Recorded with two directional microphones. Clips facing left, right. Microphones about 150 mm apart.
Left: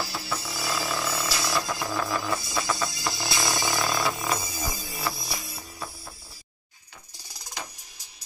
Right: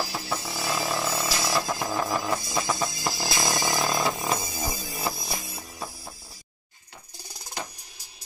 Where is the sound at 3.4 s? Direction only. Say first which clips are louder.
Right 1 dB; 20° right (ahead or behind).